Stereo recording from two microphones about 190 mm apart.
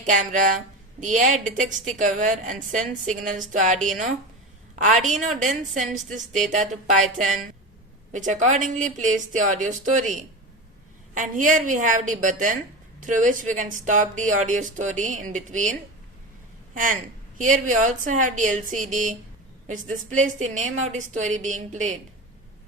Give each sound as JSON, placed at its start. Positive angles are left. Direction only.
{"t": 0.0, "sound": "a woman's voice", "side_deg": -40}